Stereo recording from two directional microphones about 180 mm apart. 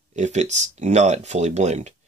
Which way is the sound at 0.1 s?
40° right (ahead or behind).